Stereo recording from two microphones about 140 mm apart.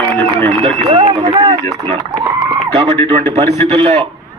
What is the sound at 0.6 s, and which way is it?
Speech, 40° right (ahead or behind).